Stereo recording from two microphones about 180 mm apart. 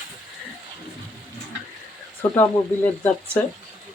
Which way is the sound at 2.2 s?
10° left (ahead or behind).